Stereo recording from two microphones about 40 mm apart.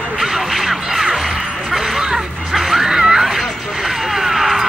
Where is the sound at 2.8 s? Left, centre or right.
Centre.